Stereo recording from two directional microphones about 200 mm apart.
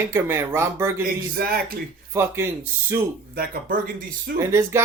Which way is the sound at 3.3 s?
45° right (ahead or behind).